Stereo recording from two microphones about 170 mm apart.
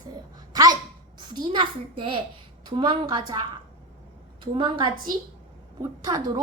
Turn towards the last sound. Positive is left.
turn(degrees=-25)  # may be behind; listen again after turning